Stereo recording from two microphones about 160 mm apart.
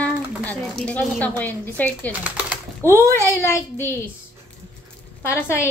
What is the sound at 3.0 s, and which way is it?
Speech, 15° left (ahead or behind).